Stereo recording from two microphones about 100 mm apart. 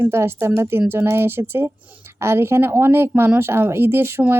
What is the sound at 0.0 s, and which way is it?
Speech, 25° right (ahead or behind).